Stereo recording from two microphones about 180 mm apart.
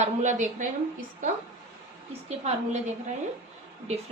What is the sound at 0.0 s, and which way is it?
Speech, 40° right (ahead or behind).